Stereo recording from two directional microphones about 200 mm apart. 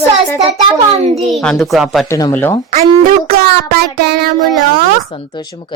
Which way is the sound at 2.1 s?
20° left (ahead or behind).